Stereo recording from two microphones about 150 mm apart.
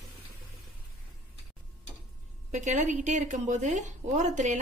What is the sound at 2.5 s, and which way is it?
A woman's voice, 55° right (ahead or behind).